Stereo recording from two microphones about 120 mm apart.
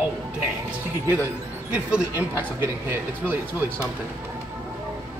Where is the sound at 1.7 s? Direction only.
15° right (ahead or behind).